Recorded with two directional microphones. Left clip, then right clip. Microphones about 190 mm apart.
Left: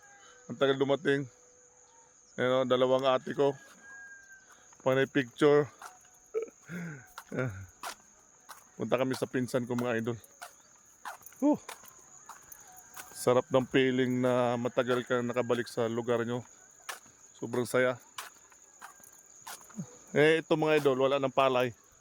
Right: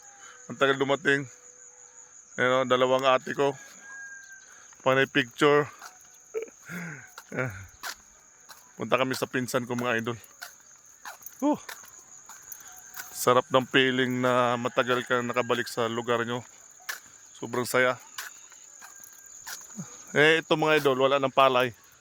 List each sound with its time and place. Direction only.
0.4 s speech: 10° right (ahead or behind)
2.3 s speech: 10° right (ahead or behind)
4.8 s speech: 15° right (ahead or behind)
6.3 s a sound: centre (ahead or behind)
8.4 s speech: 5° right (ahead or behind)
11.0 s walk: centre (ahead or behind)
12.9 s speech: 5° right (ahead or behind)
19.5 s a sound: 5° right (ahead or behind)
20.2 s speech: 15° right (ahead or behind); by 21.8 s 35° right (ahead or behind)